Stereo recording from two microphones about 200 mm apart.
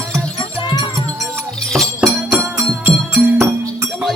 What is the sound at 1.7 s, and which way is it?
Music, centre (ahead or behind).